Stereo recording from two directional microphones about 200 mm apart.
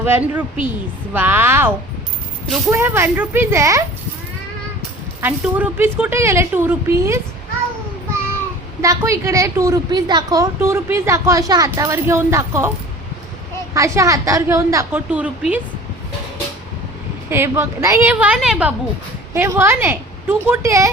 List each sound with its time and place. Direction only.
0.0 s a woman's voice: 10° right (ahead or behind)
5.2 s a woman's voice: 10° right (ahead or behind)
8.8 s a woman's voice: 15° right (ahead or behind)
13.7 s a woman's voice: 15° right (ahead or behind)
17.2 s a woman's voice: 10° right (ahead or behind)